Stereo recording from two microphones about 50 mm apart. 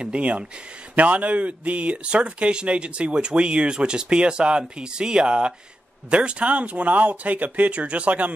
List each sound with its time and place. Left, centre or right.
0.0 s speech: right